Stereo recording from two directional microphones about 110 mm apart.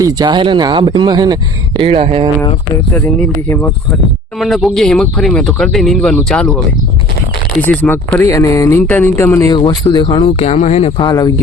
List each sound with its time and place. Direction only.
0.0 s speech: 35° right (ahead or behind)
1.8 s speech: 75° right (ahead or behind)
4.4 s speech: centre (ahead or behind)
7.6 s speech: 15° left (ahead or behind)
8.2 s speech: 30° left (ahead or behind)
9.5 s speech: 40° left (ahead or behind)
10.1 s speech: 65° left (ahead or behind)
11.0 s speech: 35° left (ahead or behind)